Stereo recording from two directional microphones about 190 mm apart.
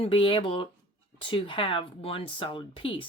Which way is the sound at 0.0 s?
30° left (ahead or behind).